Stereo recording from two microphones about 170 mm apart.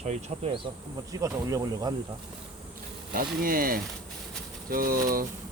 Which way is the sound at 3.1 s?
60° right (ahead or behind).